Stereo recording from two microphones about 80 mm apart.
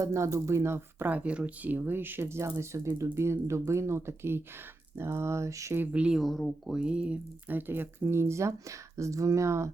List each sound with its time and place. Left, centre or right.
0.0 s speech: right
1.0 s speech: centre; by 5.7 s right
5.9 s speech: centre
6.7 s speech: centre; by 9.7 s right